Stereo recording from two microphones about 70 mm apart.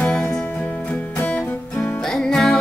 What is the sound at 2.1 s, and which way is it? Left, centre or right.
Music, centre.